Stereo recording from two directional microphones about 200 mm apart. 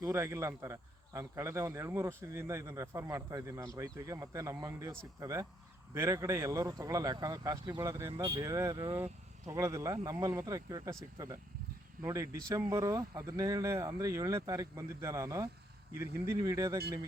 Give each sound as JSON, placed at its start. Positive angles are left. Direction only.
{"t": 0.0, "sound": "speech", "side_deg": -15}
{"t": 12.0, "sound": "speech", "side_deg": -15}